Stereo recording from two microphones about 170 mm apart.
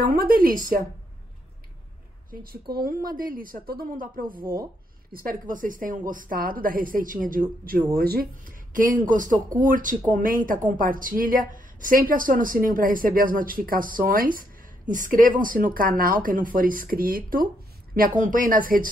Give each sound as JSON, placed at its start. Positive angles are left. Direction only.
{"t": 0.0, "sound": "speech", "side_deg": -60}
{"t": 2.8, "sound": "speech", "side_deg": -55}
{"t": 4.4, "sound": "speech", "side_deg": -15}
{"t": 5.1, "sound": "speech", "side_deg": -55}